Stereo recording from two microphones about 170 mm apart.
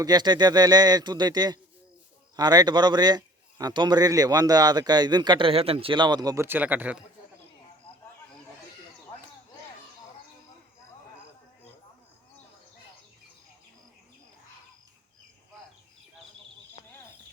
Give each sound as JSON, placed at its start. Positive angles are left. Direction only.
{"t": 0.0, "sound": "a man's voice", "side_deg": -25}